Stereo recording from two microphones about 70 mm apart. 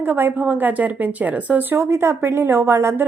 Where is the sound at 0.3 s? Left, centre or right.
Right.